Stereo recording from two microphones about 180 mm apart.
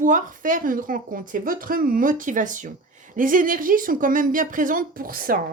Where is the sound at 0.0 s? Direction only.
45° right (ahead or behind).